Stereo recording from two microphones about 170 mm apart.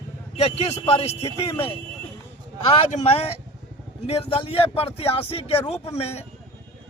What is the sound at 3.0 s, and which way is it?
Speech, 35° left (ahead or behind).